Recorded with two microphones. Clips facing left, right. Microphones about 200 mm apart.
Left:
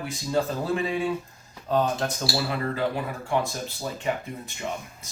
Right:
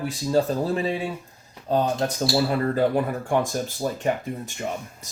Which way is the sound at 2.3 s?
45° right (ahead or behind).